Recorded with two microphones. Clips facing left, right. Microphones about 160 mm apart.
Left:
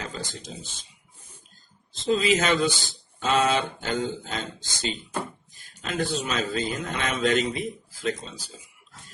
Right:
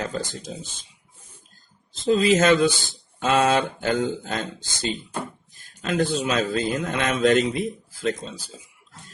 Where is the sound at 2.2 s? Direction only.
50° right (ahead or behind).